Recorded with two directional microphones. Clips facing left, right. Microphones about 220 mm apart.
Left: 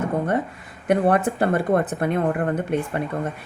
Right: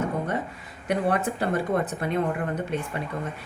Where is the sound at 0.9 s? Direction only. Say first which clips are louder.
Left 6 dB; 50° left (ahead or behind).